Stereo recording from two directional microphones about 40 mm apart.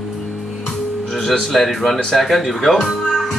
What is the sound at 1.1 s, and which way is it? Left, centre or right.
A man's voice, centre.